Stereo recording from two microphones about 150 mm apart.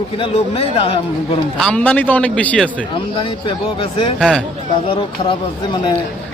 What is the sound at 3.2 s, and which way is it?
Speech, 35° left (ahead or behind).